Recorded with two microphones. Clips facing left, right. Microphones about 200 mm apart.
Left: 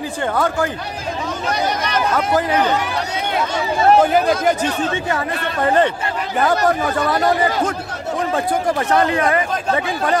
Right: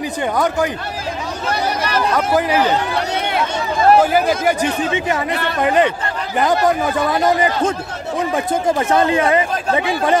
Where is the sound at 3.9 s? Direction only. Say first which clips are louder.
Even; 5° right (ahead or behind).